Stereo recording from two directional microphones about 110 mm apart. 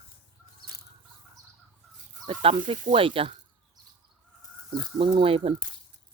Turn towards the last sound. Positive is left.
turn(degrees=-60)  # may be behind; listen again after turning